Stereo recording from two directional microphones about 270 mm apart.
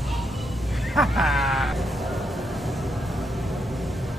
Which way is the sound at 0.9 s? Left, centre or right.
Centre.